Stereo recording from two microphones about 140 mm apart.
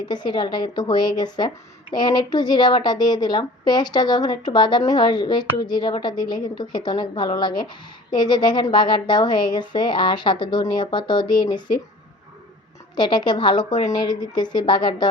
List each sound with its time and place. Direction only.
0.0 s speech: 30° left (ahead or behind)
13.0 s speech: 30° left (ahead or behind)